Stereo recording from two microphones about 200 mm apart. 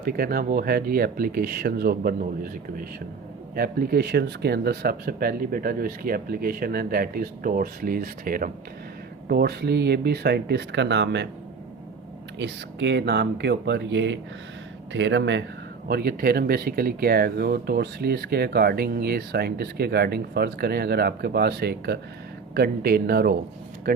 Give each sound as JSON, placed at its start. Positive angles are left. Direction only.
{"t": 0.0, "sound": "speech", "side_deg": -50}
{"t": 12.4, "sound": "speech", "side_deg": -60}
{"t": 15.9, "sound": "speech", "side_deg": -50}